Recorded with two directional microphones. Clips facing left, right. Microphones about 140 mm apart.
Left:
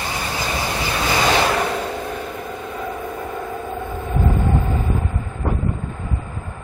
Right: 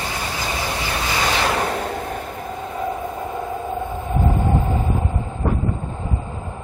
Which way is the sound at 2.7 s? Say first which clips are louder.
Right 3 dB; 25° right (ahead or behind).